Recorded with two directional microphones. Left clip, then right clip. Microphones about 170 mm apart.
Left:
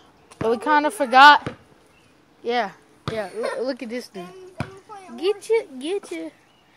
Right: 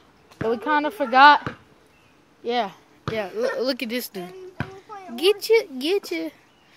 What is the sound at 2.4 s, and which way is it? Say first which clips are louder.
A woman's voice: left 1 dB; 15° right (ahead or behind).